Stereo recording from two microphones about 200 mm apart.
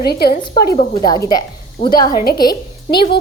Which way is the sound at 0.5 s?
20° left (ahead or behind).